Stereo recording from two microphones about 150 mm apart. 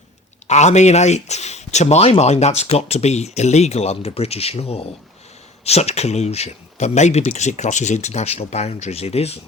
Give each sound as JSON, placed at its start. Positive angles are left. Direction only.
{"t": 0.4, "sound": "a man's voice", "side_deg": 50}